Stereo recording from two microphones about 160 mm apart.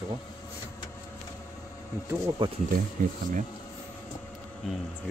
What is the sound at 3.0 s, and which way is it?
Speech, 60° right (ahead or behind).